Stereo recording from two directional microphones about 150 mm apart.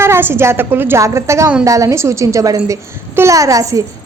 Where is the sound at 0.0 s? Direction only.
15° right (ahead or behind).